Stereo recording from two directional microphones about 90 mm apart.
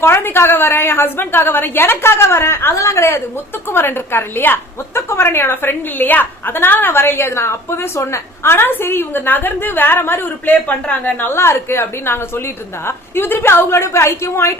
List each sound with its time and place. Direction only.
0.0 s a woman's voice: 25° left (ahead or behind)
11.3 s a woman's voice: 30° left (ahead or behind)